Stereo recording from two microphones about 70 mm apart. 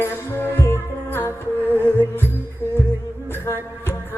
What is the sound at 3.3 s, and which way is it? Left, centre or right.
Music, left.